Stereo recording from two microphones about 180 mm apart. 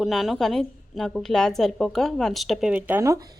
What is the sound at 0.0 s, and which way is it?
A woman's voice, centre (ahead or behind).